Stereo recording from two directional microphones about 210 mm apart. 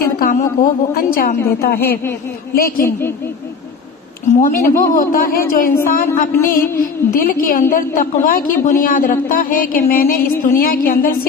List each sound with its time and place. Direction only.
0.0 s a sound: 40° left (ahead or behind)
0.6 s a woman's voice: 45° left (ahead or behind)
4.4 s a woman's voice: 40° left (ahead or behind)